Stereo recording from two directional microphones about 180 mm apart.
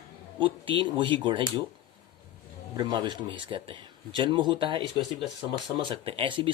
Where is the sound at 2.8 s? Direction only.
25° right (ahead or behind).